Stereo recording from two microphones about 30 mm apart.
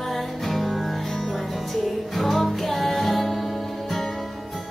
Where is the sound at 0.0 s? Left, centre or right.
Centre.